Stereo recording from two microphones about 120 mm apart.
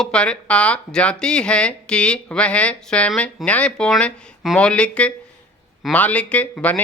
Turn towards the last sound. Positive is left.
turn(degrees=10)  # may be behind; listen again after turning